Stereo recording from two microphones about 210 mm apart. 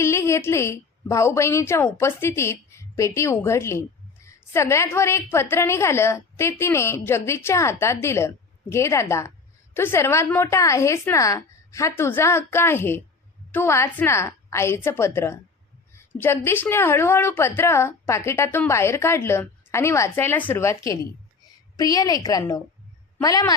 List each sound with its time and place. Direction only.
0.0 s a woman's voice: 10° left (ahead or behind)